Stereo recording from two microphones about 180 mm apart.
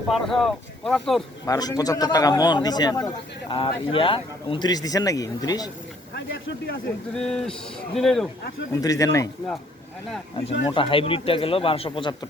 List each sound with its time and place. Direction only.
0.1 s speech: centre (ahead or behind)
1.5 s speech: 20° left (ahead or behind)
6.1 s speech: 65° left (ahead or behind)
7.2 s speech: 5° left (ahead or behind)
8.7 s speech: 20° left (ahead or behind)
10.7 s speech: 30° left (ahead or behind)